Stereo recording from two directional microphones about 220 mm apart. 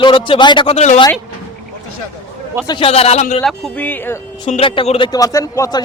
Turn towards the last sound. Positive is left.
turn(degrees=15)  # may be behind; listen again after turning